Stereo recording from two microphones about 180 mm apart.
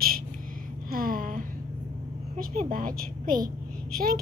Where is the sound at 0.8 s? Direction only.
55° right (ahead or behind).